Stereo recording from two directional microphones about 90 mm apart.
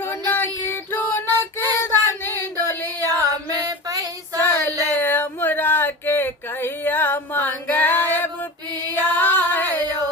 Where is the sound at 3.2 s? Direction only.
40° right (ahead or behind).